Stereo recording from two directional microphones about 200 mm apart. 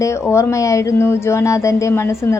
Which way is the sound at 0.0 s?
15° left (ahead or behind).